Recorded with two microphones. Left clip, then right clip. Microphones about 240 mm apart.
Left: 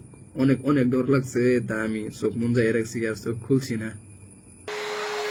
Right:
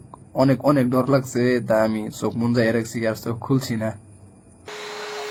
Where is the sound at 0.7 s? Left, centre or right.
Centre.